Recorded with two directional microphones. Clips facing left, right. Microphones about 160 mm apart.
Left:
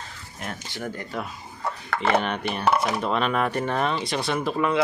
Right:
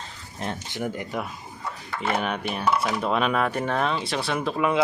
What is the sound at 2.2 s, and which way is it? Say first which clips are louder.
Speech: left 1 dB; 5° right (ahead or behind).